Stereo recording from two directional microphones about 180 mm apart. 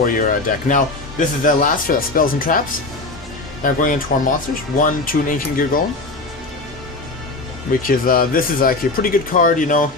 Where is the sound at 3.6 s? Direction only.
50° left (ahead or behind).